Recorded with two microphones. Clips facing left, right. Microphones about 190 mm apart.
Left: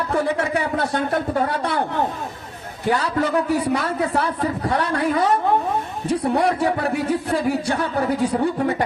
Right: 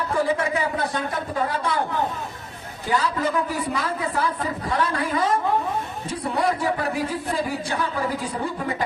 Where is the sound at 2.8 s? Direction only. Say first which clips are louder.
Left 3 dB; 70° left (ahead or behind).